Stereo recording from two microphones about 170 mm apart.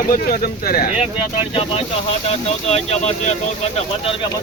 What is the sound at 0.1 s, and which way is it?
Speech, 60° left (ahead or behind).